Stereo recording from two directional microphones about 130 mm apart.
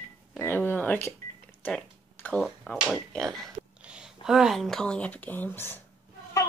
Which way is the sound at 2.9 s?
5° left (ahead or behind).